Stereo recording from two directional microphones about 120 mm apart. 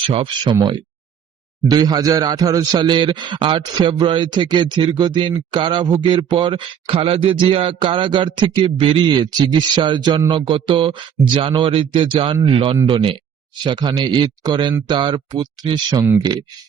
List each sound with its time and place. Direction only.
0.0 s speech: 45° right (ahead or behind)
1.6 s a man's voice: 35° right (ahead or behind)